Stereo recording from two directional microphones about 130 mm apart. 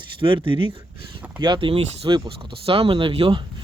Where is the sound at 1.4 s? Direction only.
40° right (ahead or behind).